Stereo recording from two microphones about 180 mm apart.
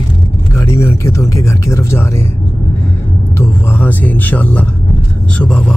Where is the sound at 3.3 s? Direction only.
10° left (ahead or behind).